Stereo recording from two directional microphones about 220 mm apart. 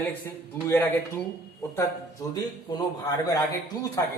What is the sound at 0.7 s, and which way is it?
Speech, 10° left (ahead or behind).